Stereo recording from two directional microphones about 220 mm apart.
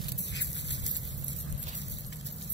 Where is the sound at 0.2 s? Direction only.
55° left (ahead or behind).